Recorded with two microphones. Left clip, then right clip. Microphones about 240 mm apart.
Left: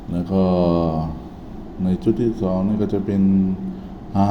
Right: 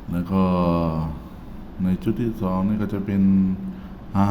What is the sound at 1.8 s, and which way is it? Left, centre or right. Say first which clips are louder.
Speech: left 6 dB; centre.